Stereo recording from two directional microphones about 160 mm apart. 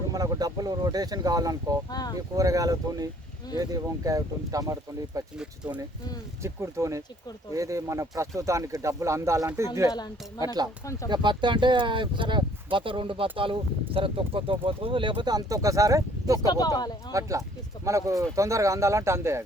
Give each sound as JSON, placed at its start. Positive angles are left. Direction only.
{"t": 0.1, "sound": "speech", "side_deg": -20}
{"t": 1.9, "sound": "speech", "side_deg": 25}
{"t": 2.3, "sound": "speech", "side_deg": -20}
{"t": 5.6, "sound": "speech", "side_deg": -10}
{"t": 9.9, "sound": "speech", "side_deg": 25}
{"t": 10.4, "sound": "speech", "side_deg": -25}
{"t": 16.5, "sound": "speech", "side_deg": 25}
{"t": 17.1, "sound": "speech", "side_deg": -20}